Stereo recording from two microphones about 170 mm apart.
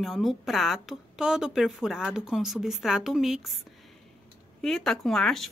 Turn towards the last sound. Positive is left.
turn(degrees=0)  # may be behind; listen again after turning